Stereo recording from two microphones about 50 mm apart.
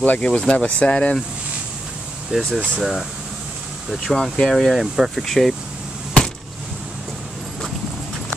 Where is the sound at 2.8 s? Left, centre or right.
Centre.